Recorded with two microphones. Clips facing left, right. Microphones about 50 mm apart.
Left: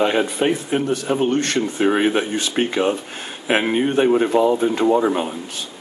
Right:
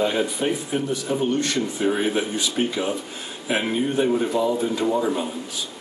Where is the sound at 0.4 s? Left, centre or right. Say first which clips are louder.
Left 5 dB; left.